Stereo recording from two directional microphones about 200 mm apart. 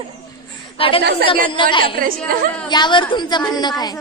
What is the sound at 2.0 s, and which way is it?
Speech, 45° right (ahead or behind).